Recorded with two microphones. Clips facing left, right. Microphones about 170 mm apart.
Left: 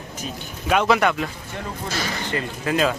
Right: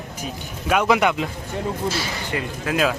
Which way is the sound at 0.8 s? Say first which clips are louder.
Right 2 dB; 15° right (ahead or behind).